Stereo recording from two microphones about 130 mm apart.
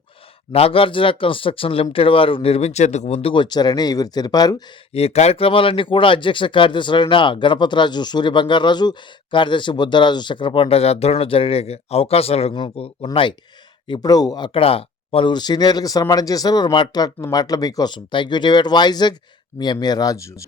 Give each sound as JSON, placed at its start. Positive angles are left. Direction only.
{"t": 0.5, "sound": "speech", "side_deg": 45}
{"t": 4.9, "sound": "speech", "side_deg": 55}
{"t": 13.8, "sound": "speech", "side_deg": 35}